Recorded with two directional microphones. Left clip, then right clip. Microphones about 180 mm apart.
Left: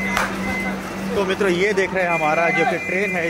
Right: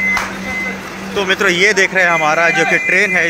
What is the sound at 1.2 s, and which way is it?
Speech, centre (ahead or behind).